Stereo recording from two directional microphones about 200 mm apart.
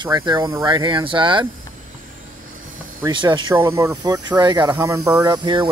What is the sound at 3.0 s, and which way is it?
Speech, 20° right (ahead or behind).